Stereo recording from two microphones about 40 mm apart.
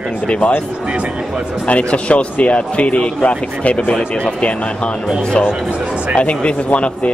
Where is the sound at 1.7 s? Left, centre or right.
Left.